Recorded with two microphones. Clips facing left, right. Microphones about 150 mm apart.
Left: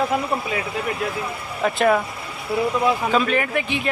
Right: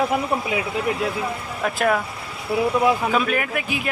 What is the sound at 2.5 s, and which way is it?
Speech, 10° right (ahead or behind).